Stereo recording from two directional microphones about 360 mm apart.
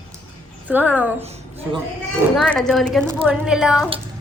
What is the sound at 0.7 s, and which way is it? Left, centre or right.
Speech, centre.